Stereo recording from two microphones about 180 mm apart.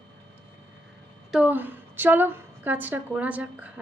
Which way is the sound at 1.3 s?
5° right (ahead or behind).